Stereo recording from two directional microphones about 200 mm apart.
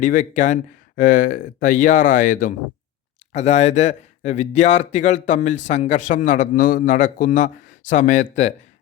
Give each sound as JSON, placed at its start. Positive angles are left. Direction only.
{"t": 0.0, "sound": "a man's voice", "side_deg": 40}